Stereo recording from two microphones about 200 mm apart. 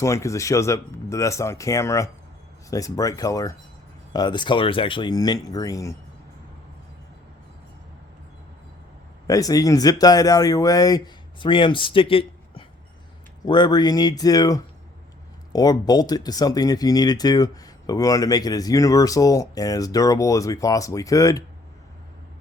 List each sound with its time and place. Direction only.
0.0 s speech: 15° left (ahead or behind)
9.2 s speech: 15° left (ahead or behind)